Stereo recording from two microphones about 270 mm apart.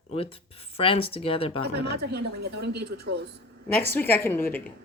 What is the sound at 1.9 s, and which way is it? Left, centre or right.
Speech, right.